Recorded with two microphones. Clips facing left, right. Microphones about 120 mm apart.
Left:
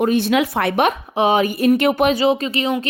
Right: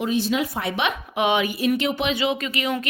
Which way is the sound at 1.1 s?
35° left (ahead or behind).